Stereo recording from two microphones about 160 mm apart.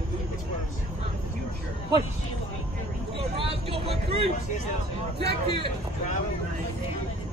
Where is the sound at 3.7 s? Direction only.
35° right (ahead or behind).